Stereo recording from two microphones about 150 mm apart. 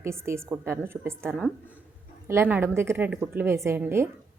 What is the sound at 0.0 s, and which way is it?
A woman's voice, 20° right (ahead or behind).